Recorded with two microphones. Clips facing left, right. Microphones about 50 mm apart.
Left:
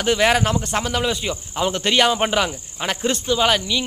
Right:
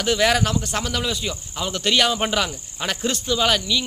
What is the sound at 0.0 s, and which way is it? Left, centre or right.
Speech, centre.